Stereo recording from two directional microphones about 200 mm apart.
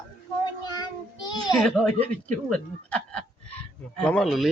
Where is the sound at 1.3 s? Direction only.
20° left (ahead or behind).